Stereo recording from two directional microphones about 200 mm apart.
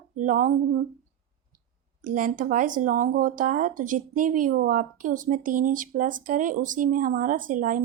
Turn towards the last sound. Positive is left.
turn(degrees=-40)  # may be behind; listen again after turning